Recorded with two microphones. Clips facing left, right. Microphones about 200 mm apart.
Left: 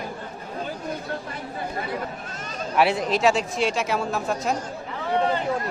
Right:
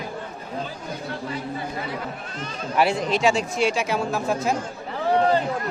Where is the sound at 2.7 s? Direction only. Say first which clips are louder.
Even; centre (ahead or behind).